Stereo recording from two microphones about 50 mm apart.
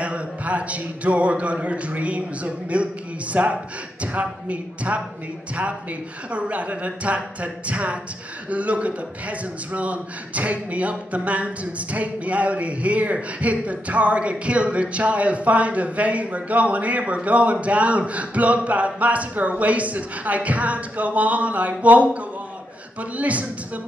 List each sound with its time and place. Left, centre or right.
0.0 s a man's voice: right